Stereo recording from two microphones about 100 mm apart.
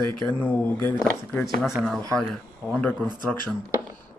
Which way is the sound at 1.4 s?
Centre (ahead or behind).